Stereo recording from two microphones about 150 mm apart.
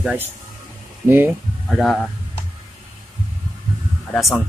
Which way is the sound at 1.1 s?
15° right (ahead or behind).